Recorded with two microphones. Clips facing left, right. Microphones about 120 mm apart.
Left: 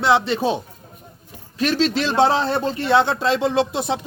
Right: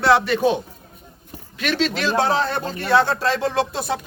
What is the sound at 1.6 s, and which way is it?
A man's voice, 35° left (ahead or behind).